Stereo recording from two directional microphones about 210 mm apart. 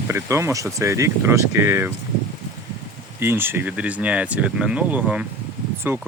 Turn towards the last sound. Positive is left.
turn(degrees=-10)  # may be behind; listen again after turning